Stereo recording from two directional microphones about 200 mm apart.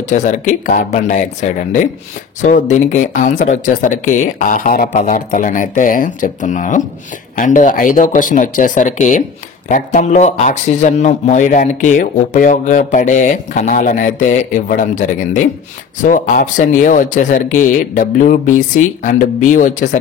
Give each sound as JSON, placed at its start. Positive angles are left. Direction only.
{"t": 0.1, "sound": "speech", "side_deg": 40}